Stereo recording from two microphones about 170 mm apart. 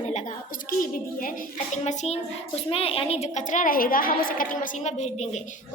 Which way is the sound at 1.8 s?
40° left (ahead or behind).